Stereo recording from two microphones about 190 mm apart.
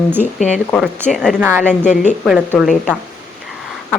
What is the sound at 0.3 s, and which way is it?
Speech, 40° left (ahead or behind).